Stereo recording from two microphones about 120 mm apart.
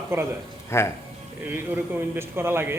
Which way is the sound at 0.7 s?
20° left (ahead or behind).